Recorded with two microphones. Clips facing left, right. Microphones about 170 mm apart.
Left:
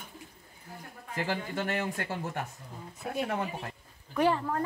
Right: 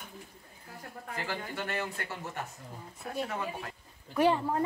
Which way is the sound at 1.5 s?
45° left (ahead or behind).